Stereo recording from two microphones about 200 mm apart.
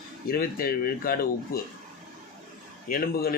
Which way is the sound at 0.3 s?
45° left (ahead or behind).